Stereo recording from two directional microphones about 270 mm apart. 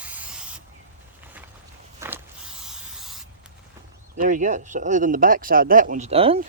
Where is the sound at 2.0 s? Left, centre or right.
Centre.